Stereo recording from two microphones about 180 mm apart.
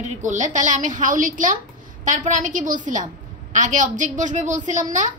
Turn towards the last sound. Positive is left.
turn(degrees=-45)  # may be behind; listen again after turning